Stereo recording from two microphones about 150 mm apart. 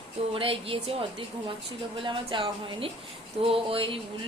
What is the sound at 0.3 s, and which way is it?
A woman's voice, 35° right (ahead or behind).